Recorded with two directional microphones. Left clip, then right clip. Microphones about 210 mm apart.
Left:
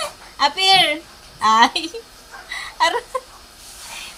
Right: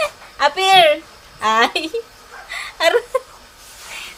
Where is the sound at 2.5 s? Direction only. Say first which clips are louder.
Right 3 dB; 25° right (ahead or behind).